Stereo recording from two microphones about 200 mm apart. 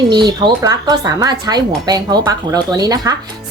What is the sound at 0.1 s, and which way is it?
Speech, 20° right (ahead or behind).